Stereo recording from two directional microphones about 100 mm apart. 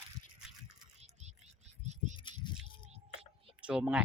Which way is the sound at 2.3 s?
55° left (ahead or behind).